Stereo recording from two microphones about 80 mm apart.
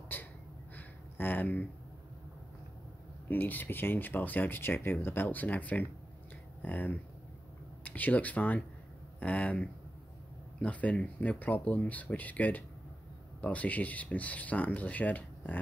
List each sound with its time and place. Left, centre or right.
0.1 s gasp: left
0.7 s a sound: left
3.3 s speech: left